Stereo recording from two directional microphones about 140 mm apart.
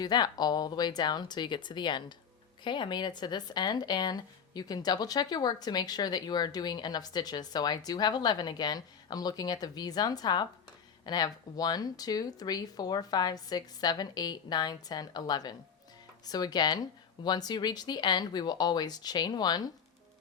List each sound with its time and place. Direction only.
0.0 s speech: 30° left (ahead or behind)